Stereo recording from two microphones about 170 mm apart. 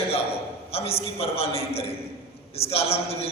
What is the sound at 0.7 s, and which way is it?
A man's voice, 35° left (ahead or behind).